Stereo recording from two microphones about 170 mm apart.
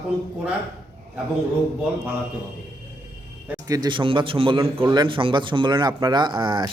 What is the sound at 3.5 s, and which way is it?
Speech, 20° right (ahead or behind).